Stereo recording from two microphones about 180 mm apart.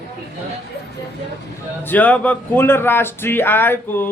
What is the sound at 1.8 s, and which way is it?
Speech, 10° left (ahead or behind).